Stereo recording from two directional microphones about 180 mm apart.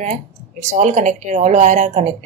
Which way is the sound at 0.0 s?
40° right (ahead or behind).